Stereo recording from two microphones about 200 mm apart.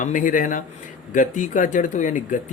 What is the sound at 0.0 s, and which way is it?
Speech, 40° left (ahead or behind).